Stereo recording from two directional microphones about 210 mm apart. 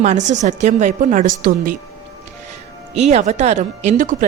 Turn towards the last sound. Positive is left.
turn(degrees=-35)  # may be behind; listen again after turning